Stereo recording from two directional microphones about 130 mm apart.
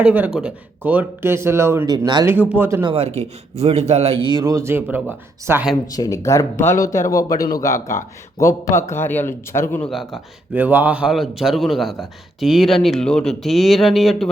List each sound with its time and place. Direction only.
0.0 s speech: 10° right (ahead or behind)
1.9 s speech: 35° right (ahead or behind)
2.2 s speech: 15° right (ahead or behind)
2.8 s speech: 50° right (ahead or behind); by 5.6 s 15° right (ahead or behind)
5.9 s speech: 25° left (ahead or behind)
9.9 s a man's voice: centre (ahead or behind)
10.5 s a man's voice: 15° right (ahead or behind)